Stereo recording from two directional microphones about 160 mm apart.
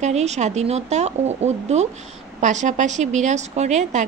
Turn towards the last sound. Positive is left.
turn(degrees=-50)  # may be behind; listen again after turning